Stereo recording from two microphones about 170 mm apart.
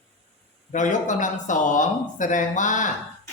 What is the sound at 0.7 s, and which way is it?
Speech, 45° left (ahead or behind).